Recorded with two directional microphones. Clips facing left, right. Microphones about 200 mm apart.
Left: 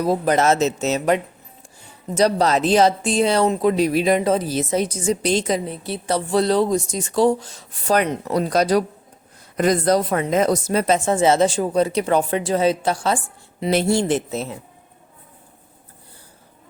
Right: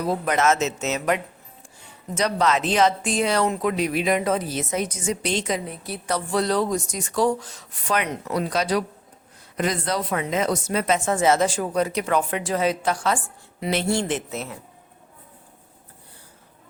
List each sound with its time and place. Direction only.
0.0 s speech: 35° left (ahead or behind)